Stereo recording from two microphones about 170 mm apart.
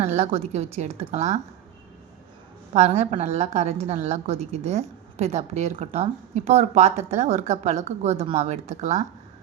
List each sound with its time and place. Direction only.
0.0 s a woman's voice: 40° right (ahead or behind)
2.7 s a woman's voice: 40° right (ahead or behind)